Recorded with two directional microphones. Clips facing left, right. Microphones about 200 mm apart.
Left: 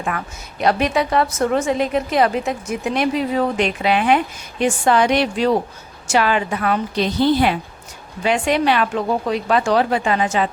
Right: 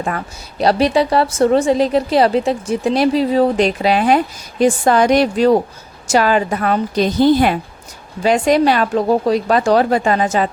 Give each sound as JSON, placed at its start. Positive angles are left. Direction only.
{"t": 0.6, "sound": "a woman's voice", "side_deg": -35}